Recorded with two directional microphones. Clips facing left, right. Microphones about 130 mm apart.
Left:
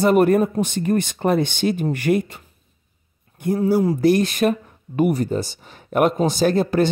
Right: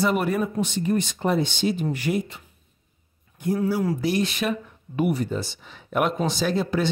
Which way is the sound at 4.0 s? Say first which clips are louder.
Left 7 dB; 50° left (ahead or behind).